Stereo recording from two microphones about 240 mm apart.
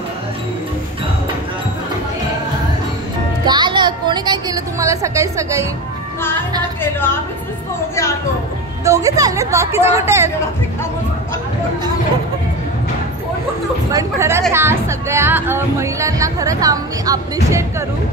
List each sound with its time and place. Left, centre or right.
3.4 s music: centre
6.8 s a woman's voice: centre
8.8 s speech: centre
13.9 s speech: centre